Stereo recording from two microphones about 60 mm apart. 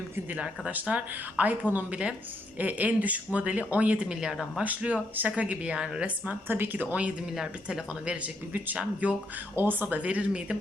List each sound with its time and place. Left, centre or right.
0.3 s speech: centre
4.6 s speech: right
6.2 s a woman's voice: right
8.0 s speech: right
9.6 s speech: right